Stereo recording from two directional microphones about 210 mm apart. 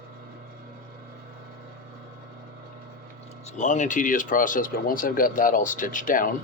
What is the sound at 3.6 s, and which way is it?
Speech, 35° left (ahead or behind).